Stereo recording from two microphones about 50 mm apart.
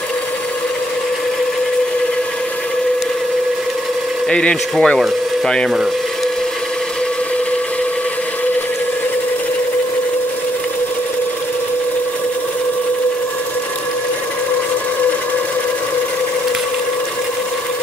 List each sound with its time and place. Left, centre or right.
4.3 s speech: centre